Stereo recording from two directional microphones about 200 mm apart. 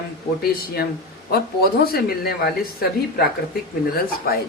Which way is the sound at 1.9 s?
50° left (ahead or behind).